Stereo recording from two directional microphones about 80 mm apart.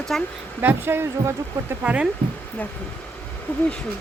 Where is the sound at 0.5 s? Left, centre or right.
Right.